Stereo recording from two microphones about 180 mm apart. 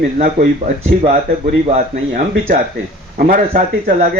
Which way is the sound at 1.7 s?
50° right (ahead or behind).